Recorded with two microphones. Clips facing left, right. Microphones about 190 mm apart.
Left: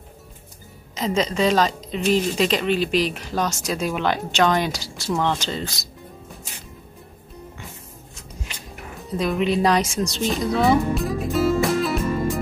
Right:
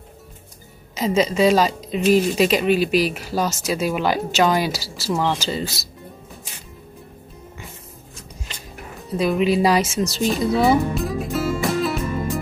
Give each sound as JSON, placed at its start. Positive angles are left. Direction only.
{"t": 0.9, "sound": "speech", "side_deg": -5}
{"t": 8.9, "sound": "music", "side_deg": 0}